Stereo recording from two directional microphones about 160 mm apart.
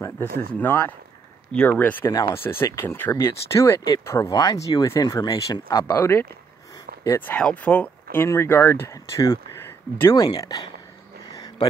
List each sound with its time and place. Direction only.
0.5 s speech: 10° left (ahead or behind)